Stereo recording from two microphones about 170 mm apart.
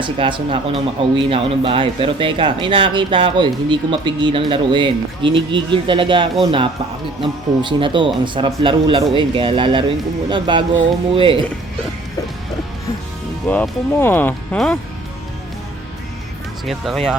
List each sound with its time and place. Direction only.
0.0 s speech: 30° right (ahead or behind)
13.5 s speech: 10° left (ahead or behind)
16.6 s speech: centre (ahead or behind)